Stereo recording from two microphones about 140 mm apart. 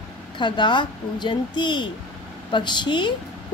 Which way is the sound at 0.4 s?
35° left (ahead or behind).